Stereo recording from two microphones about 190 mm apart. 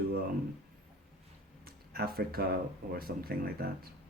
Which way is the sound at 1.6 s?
50° right (ahead or behind).